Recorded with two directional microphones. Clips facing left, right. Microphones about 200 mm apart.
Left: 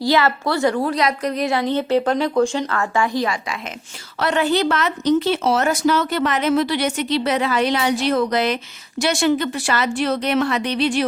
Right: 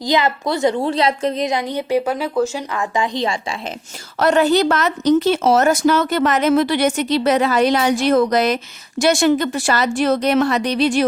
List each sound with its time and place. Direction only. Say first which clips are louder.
0.0 s a woman's voice: even; 20° right (ahead or behind)
4.2 s a woman's voice: right 4 dB; 40° right (ahead or behind)